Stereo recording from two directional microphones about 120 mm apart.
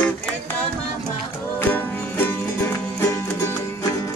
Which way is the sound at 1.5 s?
20° left (ahead or behind).